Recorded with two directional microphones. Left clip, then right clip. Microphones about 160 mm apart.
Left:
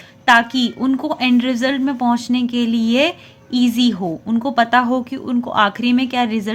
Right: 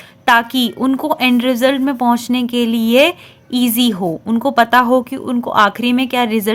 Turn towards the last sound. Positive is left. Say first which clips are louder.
# right 3 dB
turn(degrees=-30)  # may be behind; listen again after turning